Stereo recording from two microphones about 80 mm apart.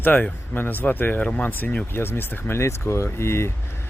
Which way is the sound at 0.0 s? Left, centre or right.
Left.